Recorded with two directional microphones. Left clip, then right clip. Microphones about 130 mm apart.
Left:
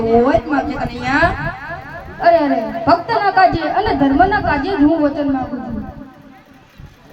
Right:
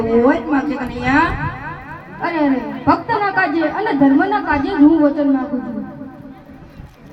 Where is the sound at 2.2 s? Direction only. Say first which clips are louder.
Left 6 dB; 30° left (ahead or behind).